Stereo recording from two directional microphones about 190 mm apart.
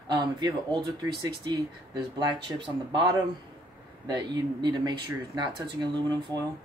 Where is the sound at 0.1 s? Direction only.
25° right (ahead or behind).